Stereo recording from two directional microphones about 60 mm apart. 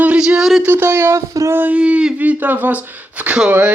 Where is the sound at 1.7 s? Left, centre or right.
Centre.